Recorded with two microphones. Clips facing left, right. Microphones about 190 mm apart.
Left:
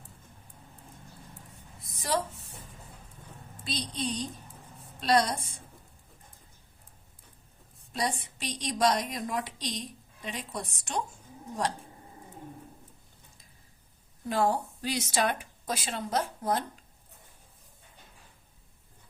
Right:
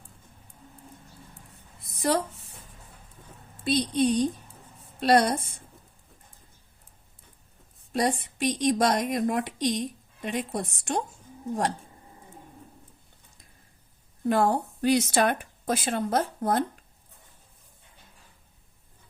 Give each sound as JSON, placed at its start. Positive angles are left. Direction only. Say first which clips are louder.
{"t": 2.0, "sound": "speech", "louder": "right 5 dB", "side_deg": -60}
{"t": 3.6, "sound": "a woman's voice", "louder": "right 11 dB", "side_deg": -55}
{"t": 7.9, "sound": "a woman's voice", "louder": "right 6 dB", "side_deg": -55}
{"t": 14.3, "sound": "a woman's voice", "louder": "right 4 dB", "side_deg": -60}